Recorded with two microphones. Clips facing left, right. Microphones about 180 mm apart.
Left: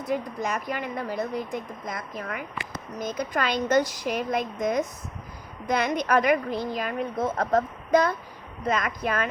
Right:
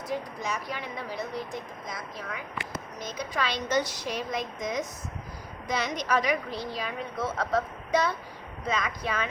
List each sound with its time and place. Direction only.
0.1 s a woman's voice: 50° left (ahead or behind)